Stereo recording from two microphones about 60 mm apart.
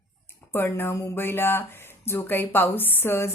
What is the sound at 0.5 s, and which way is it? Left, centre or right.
Speech, left.